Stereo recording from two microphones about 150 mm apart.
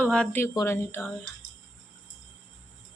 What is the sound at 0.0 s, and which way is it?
A woman's voice, 10° left (ahead or behind).